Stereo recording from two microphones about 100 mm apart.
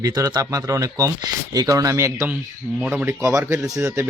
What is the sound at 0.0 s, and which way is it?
A man's voice, 40° right (ahead or behind).